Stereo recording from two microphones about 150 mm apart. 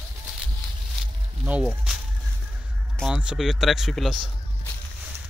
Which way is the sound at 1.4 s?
10° right (ahead or behind).